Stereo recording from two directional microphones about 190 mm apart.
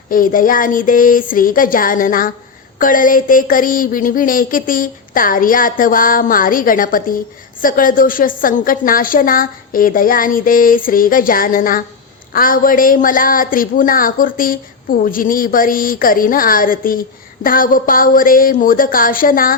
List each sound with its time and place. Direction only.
0.1 s a woman's voice: 45° left (ahead or behind)